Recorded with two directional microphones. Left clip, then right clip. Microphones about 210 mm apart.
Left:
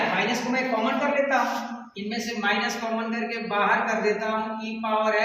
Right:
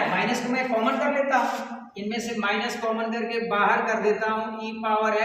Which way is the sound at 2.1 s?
20° right (ahead or behind).